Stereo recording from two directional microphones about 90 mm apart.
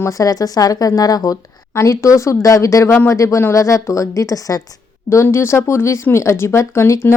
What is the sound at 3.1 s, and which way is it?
Speech, 35° left (ahead or behind).